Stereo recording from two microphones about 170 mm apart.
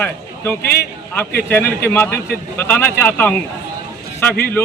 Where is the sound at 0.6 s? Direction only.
65° left (ahead or behind).